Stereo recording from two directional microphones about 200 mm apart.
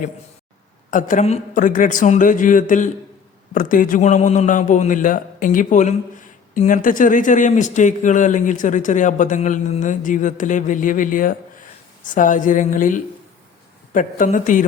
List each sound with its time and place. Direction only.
0.9 s a man's voice: 40° left (ahead or behind)